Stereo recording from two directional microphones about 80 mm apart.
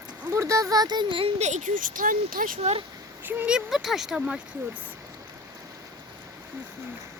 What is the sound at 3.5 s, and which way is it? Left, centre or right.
Speech, centre.